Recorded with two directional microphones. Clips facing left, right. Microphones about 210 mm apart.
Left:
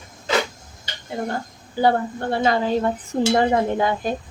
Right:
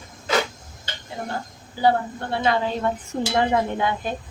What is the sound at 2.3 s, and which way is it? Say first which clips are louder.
A woman's voice: left 3 dB; 40° left (ahead or behind).